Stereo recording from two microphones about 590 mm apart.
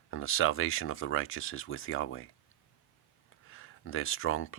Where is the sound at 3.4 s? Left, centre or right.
Left.